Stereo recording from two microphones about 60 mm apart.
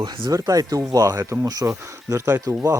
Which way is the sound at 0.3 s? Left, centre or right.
Right.